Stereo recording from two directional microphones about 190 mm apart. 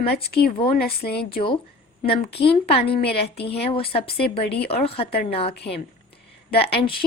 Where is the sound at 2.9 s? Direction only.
60° left (ahead or behind).